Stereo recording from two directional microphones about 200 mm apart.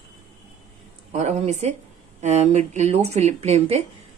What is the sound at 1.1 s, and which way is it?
A woman's voice, 35° right (ahead or behind).